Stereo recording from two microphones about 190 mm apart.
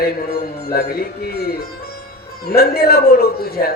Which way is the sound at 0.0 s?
50° left (ahead or behind).